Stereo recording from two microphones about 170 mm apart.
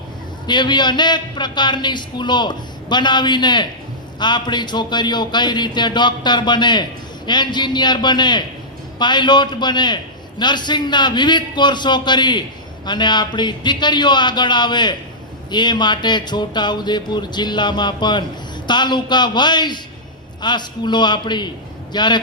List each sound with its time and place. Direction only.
0.4 s a man's voice: 25° left (ahead or behind)